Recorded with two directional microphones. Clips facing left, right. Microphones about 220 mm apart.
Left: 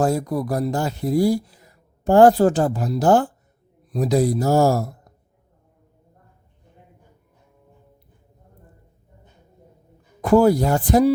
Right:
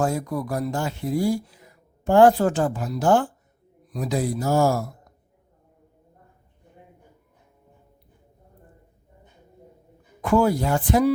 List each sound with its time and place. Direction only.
0.0 s speech: 35° left (ahead or behind)
10.2 s speech: 35° left (ahead or behind)